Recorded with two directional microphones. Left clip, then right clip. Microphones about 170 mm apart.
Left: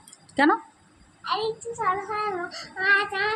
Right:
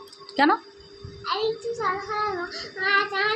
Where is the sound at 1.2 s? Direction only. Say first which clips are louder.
Right 1 dB; 5° left (ahead or behind).